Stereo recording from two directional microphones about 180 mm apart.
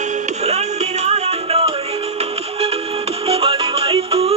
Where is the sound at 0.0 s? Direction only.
40° right (ahead or behind).